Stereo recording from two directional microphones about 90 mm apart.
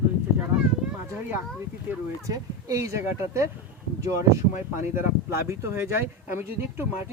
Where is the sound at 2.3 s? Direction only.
40° right (ahead or behind).